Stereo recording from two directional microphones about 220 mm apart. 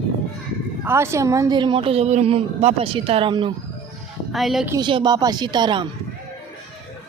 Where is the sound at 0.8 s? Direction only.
10° right (ahead or behind).